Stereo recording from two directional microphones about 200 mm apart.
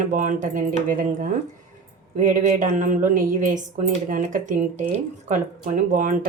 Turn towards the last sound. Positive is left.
turn(degrees=-40)  # may be behind; listen again after turning